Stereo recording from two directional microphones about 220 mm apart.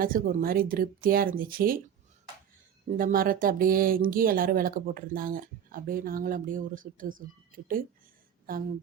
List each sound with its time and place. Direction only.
0.0 s speech: 40° right (ahead or behind)
3.0 s speech: 40° right (ahead or behind)